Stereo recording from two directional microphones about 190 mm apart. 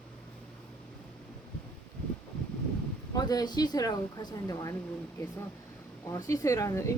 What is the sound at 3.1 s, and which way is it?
Speech, 20° left (ahead or behind).